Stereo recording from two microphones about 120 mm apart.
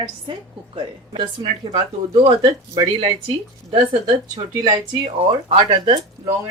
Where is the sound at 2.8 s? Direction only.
45° right (ahead or behind).